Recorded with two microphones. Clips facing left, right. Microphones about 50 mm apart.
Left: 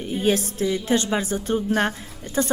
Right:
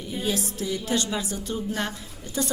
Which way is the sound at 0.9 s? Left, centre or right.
Left.